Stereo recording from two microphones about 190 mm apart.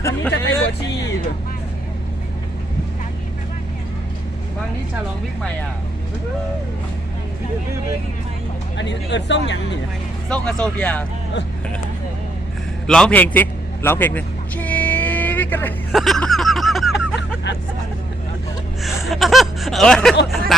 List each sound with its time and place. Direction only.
0.0 s speech: 15° left (ahead or behind)
8.8 s speech: 70° left (ahead or behind)
10.2 s speech: 5° left (ahead or behind)
12.9 s vehicle: 5° left (ahead or behind)
16.0 s a sound: centre (ahead or behind)
18.8 s gasp: centre (ahead or behind)
20.2 s speech: centre (ahead or behind)